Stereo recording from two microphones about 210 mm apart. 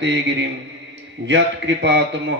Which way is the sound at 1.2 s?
55° right (ahead or behind).